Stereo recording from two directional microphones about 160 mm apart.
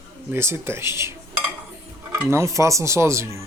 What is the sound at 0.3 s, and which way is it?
Speech, 15° right (ahead or behind).